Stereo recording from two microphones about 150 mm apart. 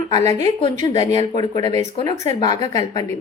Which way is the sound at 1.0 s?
45° right (ahead or behind).